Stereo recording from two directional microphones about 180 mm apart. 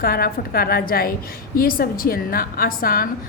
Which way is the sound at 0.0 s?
55° left (ahead or behind).